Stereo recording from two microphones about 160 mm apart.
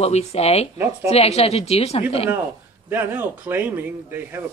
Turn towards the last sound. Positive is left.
turn(degrees=-15)  # may be behind; listen again after turning